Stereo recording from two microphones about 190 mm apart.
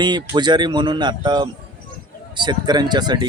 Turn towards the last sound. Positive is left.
turn(degrees=-20)  # may be behind; listen again after turning